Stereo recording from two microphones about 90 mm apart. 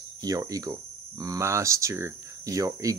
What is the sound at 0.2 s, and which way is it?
Speech, 40° right (ahead or behind).